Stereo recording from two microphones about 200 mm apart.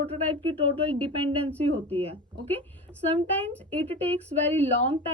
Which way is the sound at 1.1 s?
25° right (ahead or behind).